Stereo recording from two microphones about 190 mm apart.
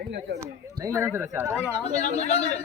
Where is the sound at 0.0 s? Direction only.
65° right (ahead or behind).